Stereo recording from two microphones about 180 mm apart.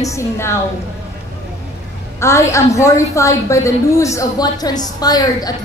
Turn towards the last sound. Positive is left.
turn(degrees=20)  # may be behind; listen again after turning